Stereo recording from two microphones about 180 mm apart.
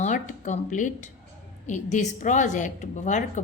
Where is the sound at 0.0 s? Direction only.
45° left (ahead or behind).